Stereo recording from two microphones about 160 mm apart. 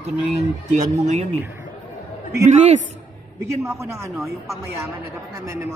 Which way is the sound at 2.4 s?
45° right (ahead or behind).